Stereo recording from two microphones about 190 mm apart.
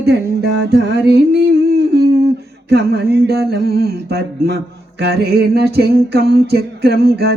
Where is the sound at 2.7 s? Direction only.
60° right (ahead or behind).